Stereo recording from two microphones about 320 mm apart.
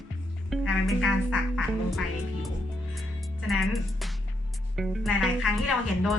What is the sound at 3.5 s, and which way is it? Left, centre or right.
Speech, centre.